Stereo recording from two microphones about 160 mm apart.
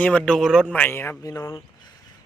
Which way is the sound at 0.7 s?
10° left (ahead or behind).